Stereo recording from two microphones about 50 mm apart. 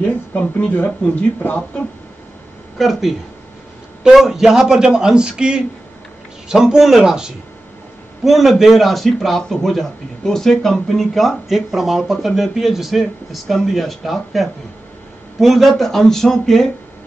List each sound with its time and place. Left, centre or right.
0.0 s speech: left
2.8 s a man's voice: centre